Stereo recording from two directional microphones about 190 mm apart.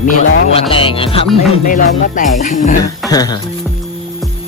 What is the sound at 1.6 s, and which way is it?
Music, 45° left (ahead or behind).